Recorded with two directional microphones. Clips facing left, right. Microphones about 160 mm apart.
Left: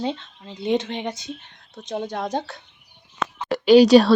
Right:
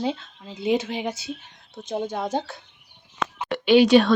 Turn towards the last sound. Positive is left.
turn(degrees=35)  # may be behind; listen again after turning